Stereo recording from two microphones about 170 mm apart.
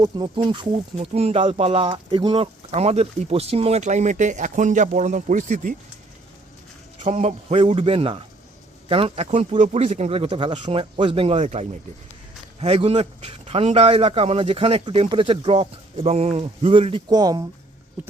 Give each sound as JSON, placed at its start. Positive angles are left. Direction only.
{"t": 0.0, "sound": "speech", "side_deg": -25}
{"t": 7.0, "sound": "speech", "side_deg": -40}